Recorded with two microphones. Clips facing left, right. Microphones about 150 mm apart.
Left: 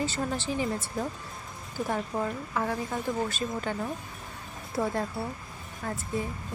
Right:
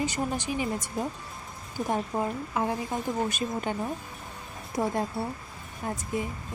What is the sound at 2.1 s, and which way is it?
Speech, 20° right (ahead or behind).